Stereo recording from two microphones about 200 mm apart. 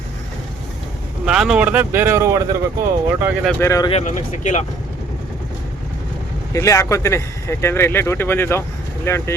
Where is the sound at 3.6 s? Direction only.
15° left (ahead or behind).